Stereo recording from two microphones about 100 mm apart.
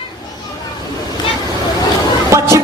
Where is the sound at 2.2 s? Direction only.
30° right (ahead or behind).